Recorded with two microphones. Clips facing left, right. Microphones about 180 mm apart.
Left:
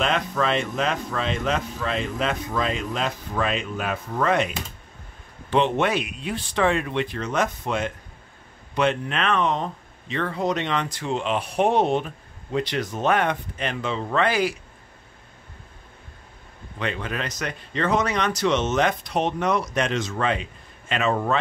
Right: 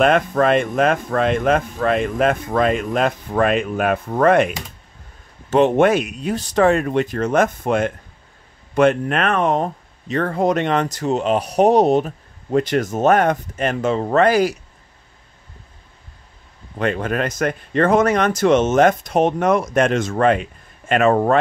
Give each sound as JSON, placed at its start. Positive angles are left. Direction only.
{"t": 0.0, "sound": "speech", "side_deg": -50}
{"t": 16.7, "sound": "speech", "side_deg": -50}